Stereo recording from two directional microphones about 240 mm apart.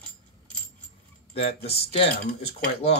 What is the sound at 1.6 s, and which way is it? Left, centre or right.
Speech, left.